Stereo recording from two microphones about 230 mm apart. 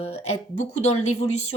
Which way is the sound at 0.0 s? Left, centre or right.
Left.